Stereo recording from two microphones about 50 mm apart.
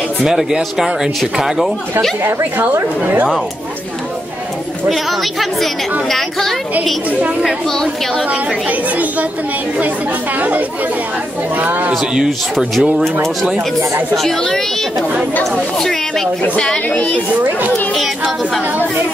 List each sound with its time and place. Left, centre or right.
0.2 s speech: centre
2.5 s speech: right
4.8 s speech: centre
7.1 s a child's voice: right
7.6 s a woman's voice: centre
8.6 s speech: right
11.5 s speech: right
12.3 s speech: centre
14.1 s a woman's voice: centre
16.5 s a woman's voice: centre
17.4 s a child's voice: right
18.0 s speech: centre